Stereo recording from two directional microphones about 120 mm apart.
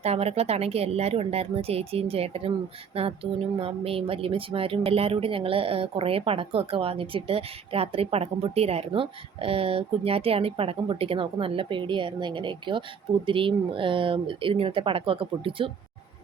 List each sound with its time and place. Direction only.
0.0 s a woman's voice: 60° right (ahead or behind)